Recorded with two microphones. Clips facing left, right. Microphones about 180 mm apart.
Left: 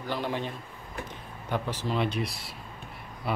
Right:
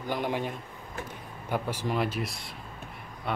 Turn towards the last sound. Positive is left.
turn(degrees=5)  # may be behind; listen again after turning